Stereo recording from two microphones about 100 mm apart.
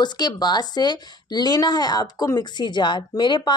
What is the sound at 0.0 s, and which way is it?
Speech, 45° left (ahead or behind).